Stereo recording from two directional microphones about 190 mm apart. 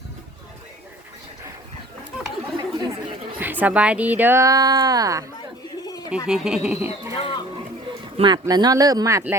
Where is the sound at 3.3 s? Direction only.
10° right (ahead or behind).